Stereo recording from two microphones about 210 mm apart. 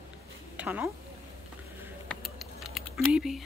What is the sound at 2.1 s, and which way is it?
Typing, centre (ahead or behind).